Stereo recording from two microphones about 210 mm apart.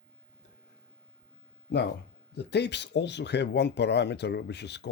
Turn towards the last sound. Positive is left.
turn(degrees=55)  # may be behind; listen again after turning